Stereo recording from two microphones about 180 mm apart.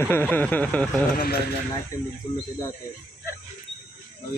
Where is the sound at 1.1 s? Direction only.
55° left (ahead or behind).